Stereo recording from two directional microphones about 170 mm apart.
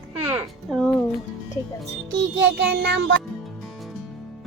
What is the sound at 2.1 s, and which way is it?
Music, 90° right.